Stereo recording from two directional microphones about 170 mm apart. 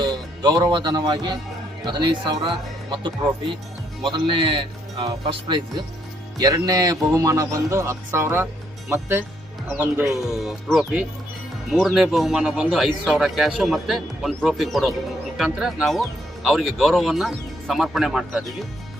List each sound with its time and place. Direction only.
0.0 s a man's voice: 25° right (ahead or behind)
10.2 s speech: centre (ahead or behind)